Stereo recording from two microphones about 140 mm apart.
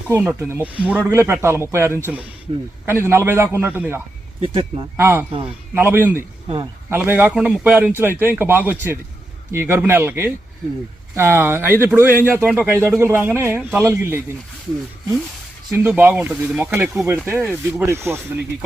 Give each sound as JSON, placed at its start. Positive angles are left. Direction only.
{"t": 0.1, "sound": "speech", "side_deg": -20}
{"t": 4.4, "sound": "speech", "side_deg": -40}
{"t": 4.9, "sound": "speech", "side_deg": -15}
{"t": 15.7, "sound": "speech", "side_deg": -15}